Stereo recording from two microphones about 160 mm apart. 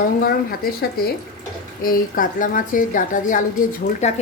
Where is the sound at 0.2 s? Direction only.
70° left (ahead or behind).